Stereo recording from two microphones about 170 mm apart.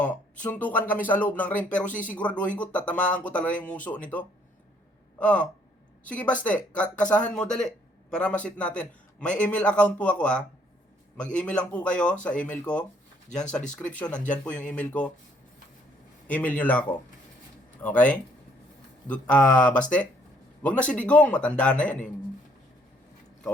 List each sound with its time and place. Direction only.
0.5 s a man's voice: 10° left (ahead or behind)
13.3 s speech: 45° left (ahead or behind)
13.7 s speech: 5° left (ahead or behind)
16.2 s speech: 10° left (ahead or behind)
17.8 s speech: 10° left (ahead or behind)
19.5 s speech: 50° left (ahead or behind)
20.6 s speech: 5° left (ahead or behind)